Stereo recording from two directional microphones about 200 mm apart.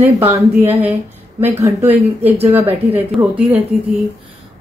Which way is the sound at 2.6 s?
25° right (ahead or behind).